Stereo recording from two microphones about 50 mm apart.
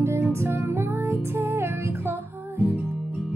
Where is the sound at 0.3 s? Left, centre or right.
Right.